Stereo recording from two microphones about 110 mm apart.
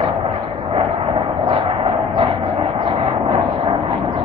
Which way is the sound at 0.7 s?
55° right (ahead or behind).